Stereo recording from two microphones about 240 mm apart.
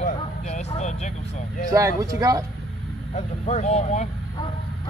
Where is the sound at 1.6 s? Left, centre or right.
Centre.